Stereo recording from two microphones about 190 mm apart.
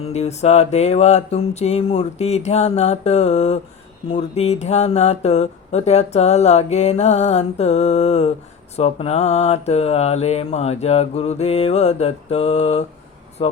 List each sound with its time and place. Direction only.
0.0 s speech: 35° left (ahead or behind)